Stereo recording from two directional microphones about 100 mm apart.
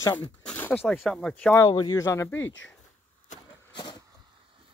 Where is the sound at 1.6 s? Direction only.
40° left (ahead or behind).